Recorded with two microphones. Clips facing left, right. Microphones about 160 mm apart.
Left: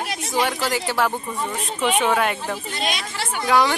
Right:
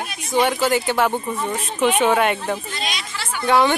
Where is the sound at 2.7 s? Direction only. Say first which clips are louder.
Left 2 dB; 50° left (ahead or behind).